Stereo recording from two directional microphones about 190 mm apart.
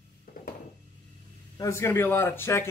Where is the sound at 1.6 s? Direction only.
15° left (ahead or behind).